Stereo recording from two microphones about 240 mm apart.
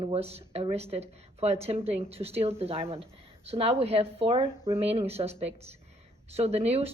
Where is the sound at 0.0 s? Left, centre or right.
Right.